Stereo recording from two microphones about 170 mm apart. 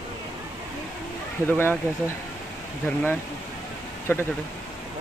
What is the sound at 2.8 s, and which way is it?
A man's voice, 10° left (ahead or behind).